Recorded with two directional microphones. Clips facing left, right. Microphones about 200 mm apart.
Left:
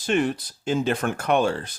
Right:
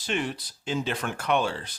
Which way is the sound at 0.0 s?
50° left (ahead or behind).